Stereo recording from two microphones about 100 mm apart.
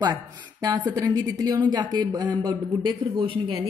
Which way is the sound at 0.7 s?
45° right (ahead or behind).